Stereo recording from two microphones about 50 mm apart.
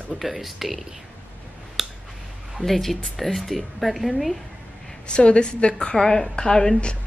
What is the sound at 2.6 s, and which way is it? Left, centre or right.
Speech, centre.